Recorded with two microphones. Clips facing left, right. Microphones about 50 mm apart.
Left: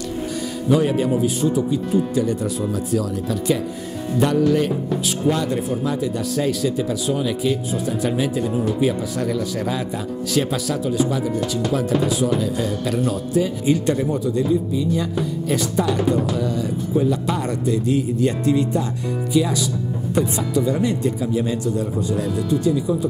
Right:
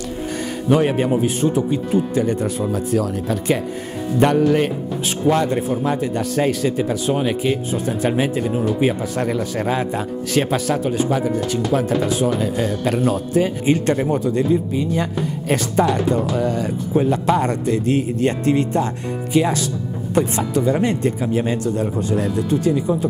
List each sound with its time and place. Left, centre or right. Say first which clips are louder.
0.7 s a man's voice: right 1 dB; right
20.2 s speech: right 2 dB; right